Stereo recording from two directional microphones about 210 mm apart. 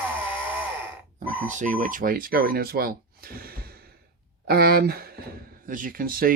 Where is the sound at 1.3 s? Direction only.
35° right (ahead or behind).